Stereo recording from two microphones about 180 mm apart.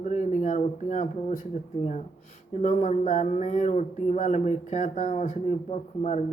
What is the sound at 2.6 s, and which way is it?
Speech, 40° left (ahead or behind).